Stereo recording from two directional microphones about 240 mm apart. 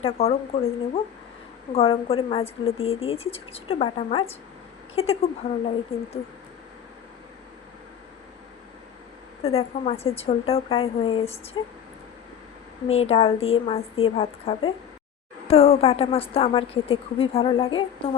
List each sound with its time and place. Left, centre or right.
0.0 s a woman's voice: left
9.4 s a woman's voice: left
12.9 s a woman's voice: left